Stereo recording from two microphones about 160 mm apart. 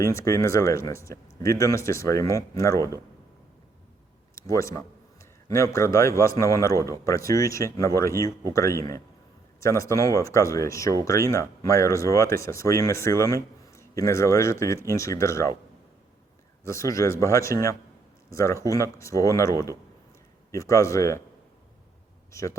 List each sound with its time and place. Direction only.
0.0 s speech: 20° left (ahead or behind)
4.4 s speech: 20° left (ahead or behind)
16.6 s speech: 20° left (ahead or behind)
22.3 s speech: 20° left (ahead or behind)